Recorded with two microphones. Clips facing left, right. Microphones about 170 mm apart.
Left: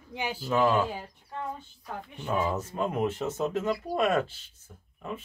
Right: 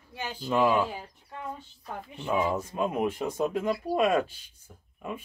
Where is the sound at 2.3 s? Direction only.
10° right (ahead or behind).